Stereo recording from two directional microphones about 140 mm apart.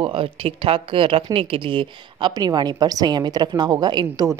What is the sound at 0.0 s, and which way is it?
Speech, 40° right (ahead or behind).